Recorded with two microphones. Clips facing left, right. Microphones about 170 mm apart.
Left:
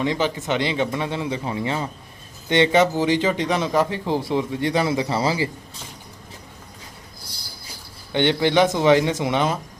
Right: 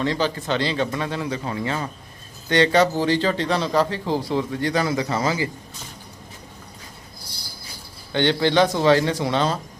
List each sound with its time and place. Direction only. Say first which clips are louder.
0.0 s a man's voice: even; 15° left (ahead or behind)
8.1 s speech: left 1 dB; 20° left (ahead or behind)